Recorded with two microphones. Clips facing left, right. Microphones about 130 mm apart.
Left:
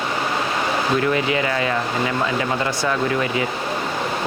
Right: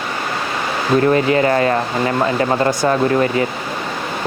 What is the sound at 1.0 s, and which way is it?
Speech, 40° right (ahead or behind).